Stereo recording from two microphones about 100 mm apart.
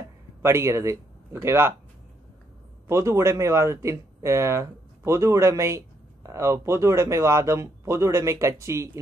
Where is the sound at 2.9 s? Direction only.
30° right (ahead or behind).